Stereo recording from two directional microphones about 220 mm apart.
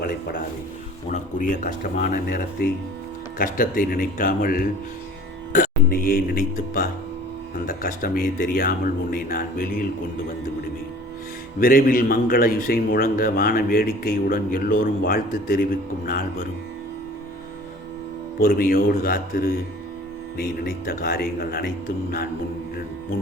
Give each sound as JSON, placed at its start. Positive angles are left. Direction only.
{"t": 0.0, "sound": "a sound", "side_deg": 45}
{"t": 1.1, "sound": "a man's voice", "side_deg": 35}
{"t": 11.6, "sound": "a man's voice", "side_deg": 40}
{"t": 18.3, "sound": "a man's voice", "side_deg": 40}